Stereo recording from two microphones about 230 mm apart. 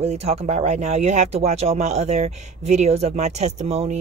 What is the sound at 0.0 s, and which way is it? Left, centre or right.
Speech, right.